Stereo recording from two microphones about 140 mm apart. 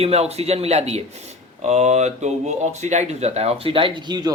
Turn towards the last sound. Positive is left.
turn(degrees=-30)  # may be behind; listen again after turning